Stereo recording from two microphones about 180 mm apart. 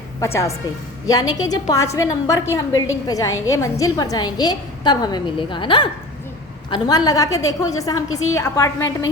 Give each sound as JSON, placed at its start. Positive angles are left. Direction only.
{"t": 1.0, "sound": "a woman's voice", "side_deg": 20}